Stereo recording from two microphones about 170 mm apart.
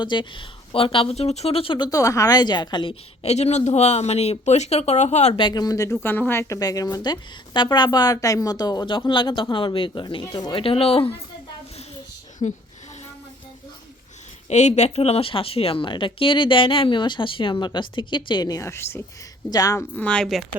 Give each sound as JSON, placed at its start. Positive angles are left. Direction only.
{"t": 0.0, "sound": "speech", "side_deg": 30}
{"t": 5.4, "sound": "a woman's voice", "side_deg": 25}
{"t": 12.4, "sound": "a woman's voice", "side_deg": 45}
{"t": 14.5, "sound": "a woman's voice", "side_deg": 40}
{"t": 20.0, "sound": "speech", "side_deg": 5}